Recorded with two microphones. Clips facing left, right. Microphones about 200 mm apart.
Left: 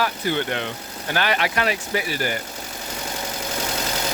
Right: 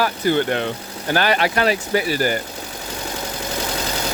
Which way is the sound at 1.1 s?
40° right (ahead or behind).